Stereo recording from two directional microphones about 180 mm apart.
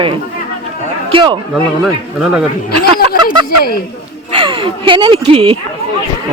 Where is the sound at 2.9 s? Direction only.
25° right (ahead or behind).